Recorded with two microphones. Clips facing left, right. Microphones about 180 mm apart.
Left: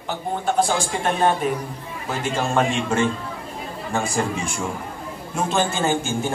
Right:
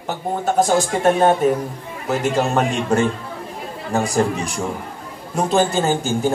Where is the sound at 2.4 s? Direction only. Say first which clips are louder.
Right 2 dB; 40° right (ahead or behind).